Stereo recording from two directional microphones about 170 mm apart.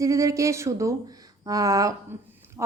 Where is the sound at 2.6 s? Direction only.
15° right (ahead or behind).